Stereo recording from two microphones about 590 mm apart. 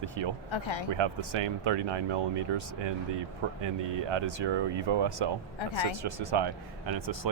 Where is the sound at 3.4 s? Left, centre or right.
Right.